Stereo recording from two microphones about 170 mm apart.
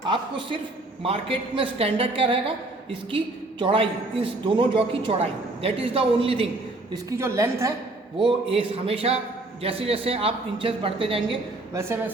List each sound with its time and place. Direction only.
0.1 s a man's voice: 30° right (ahead or behind)
3.6 s a woman's voice: 30° right (ahead or behind)
6.9 s a woman's voice: 15° right (ahead or behind)
8.2 s a woman's voice: 30° right (ahead or behind)
11.7 s a woman's voice: 15° right (ahead or behind)